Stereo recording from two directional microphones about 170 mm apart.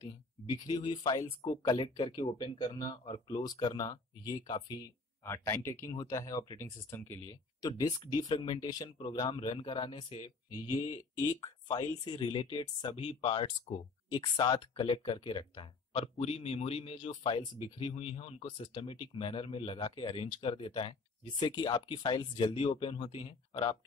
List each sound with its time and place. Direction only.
0.0 s speech: 25° left (ahead or behind)